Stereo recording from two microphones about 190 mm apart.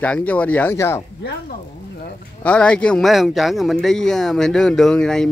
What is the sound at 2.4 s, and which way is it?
A man's voice, 5° left (ahead or behind).